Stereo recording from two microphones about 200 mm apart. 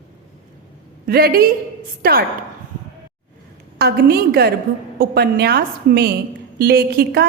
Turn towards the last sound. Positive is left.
turn(degrees=-50)  # may be behind; listen again after turning